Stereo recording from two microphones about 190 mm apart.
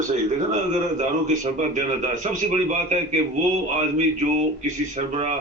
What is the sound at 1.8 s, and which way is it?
A man's voice, 40° right (ahead or behind).